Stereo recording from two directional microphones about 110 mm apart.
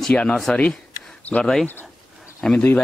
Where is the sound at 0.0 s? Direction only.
10° left (ahead or behind).